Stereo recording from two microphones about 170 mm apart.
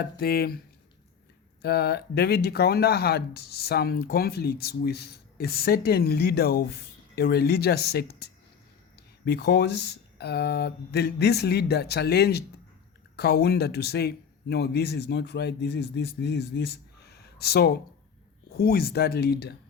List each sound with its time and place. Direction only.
0.0 s speech: 65° left (ahead or behind)
1.6 s speech: 70° left (ahead or behind)
9.2 s speech: 75° left (ahead or behind)